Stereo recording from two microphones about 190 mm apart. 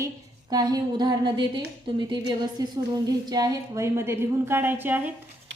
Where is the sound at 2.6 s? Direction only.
20° right (ahead or behind).